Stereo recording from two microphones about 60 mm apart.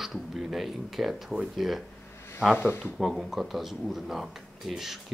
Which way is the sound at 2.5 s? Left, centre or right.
Left.